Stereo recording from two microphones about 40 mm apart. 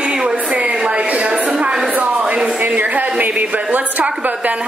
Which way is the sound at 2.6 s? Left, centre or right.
Right.